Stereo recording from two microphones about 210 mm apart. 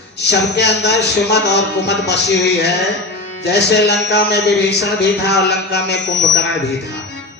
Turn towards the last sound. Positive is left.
turn(degrees=55)  # may be behind; listen again after turning